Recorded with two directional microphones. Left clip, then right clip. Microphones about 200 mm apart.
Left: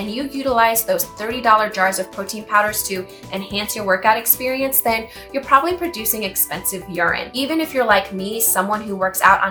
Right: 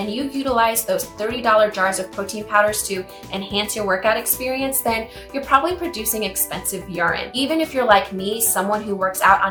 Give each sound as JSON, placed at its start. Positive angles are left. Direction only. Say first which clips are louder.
{"t": 0.4, "sound": "a woman's voice", "louder": "left 3 dB", "side_deg": 20}